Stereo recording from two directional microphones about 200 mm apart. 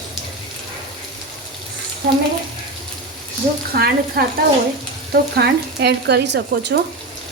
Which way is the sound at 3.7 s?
50° right (ahead or behind).